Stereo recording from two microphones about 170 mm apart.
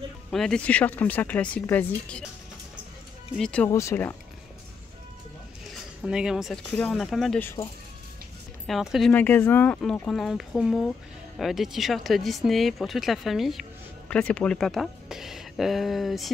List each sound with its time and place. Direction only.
0.3 s speech: 5° left (ahead or behind)
3.3 s speech: 5° left (ahead or behind)
6.0 s speech: 5° right (ahead or behind)
7.6 s speech: 25° left (ahead or behind)
8.6 s speech: centre (ahead or behind)
9.1 s speech: 10° left (ahead or behind)